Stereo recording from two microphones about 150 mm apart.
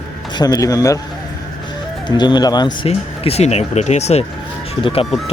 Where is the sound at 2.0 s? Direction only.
30° left (ahead or behind).